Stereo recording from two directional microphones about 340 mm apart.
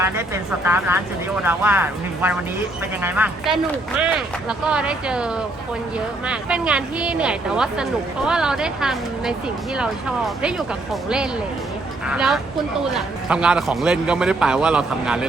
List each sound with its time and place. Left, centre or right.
0.0 s a man's voice: centre
12.0 s a man's voice: centre